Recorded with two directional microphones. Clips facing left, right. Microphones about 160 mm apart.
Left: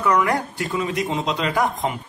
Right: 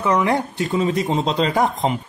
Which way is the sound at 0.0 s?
25° right (ahead or behind).